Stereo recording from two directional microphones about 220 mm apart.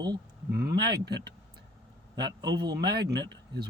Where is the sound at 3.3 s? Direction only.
50° right (ahead or behind).